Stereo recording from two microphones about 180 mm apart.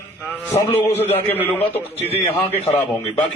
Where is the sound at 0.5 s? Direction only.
35° left (ahead or behind).